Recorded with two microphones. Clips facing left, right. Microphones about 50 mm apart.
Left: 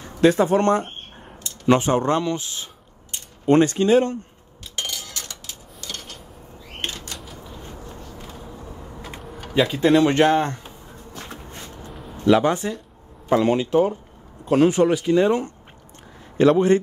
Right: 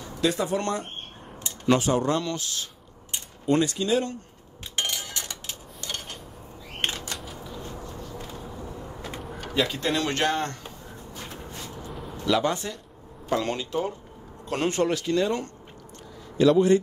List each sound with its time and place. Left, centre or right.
0.0 s speech: left
2.2 s speech: left
3.4 s speech: left
4.7 s cutlery: right
7.1 s typewriter: centre
9.0 s tick-tock: centre
9.5 s speech: centre
12.3 s speech: left
14.5 s speech: centre
16.3 s speech: left